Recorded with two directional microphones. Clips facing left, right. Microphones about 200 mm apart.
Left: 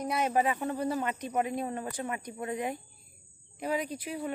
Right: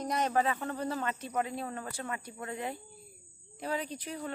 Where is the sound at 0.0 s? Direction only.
10° left (ahead or behind).